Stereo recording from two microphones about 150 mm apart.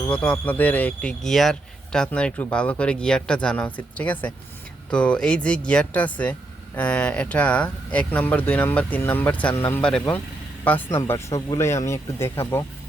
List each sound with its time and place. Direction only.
0.1 s a man's voice: 10° left (ahead or behind)